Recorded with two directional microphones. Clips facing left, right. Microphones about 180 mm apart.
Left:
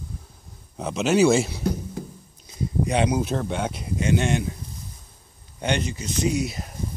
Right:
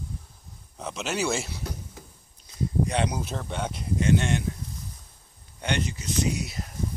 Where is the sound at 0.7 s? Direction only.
15° left (ahead or behind).